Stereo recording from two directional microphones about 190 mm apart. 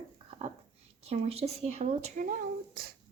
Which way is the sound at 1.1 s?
30° right (ahead or behind).